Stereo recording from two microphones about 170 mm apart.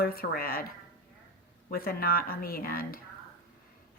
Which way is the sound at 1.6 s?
60° left (ahead or behind).